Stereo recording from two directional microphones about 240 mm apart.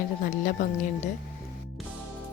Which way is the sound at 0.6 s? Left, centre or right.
Left.